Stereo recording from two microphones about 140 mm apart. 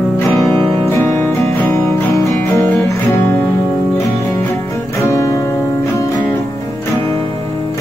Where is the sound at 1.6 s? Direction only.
20° left (ahead or behind).